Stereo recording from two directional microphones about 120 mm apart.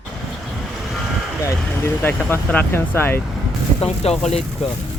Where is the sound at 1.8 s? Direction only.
15° left (ahead or behind).